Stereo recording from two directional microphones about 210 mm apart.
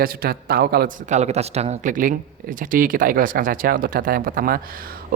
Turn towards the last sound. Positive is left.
turn(degrees=-40)  # may be behind; listen again after turning